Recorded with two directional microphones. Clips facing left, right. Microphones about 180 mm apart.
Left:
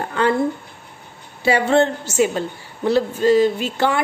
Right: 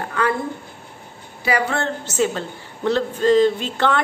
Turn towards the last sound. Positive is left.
turn(degrees=10)  # may be behind; listen again after turning